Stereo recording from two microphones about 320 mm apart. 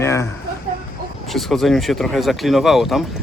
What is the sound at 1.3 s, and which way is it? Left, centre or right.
Speech, centre.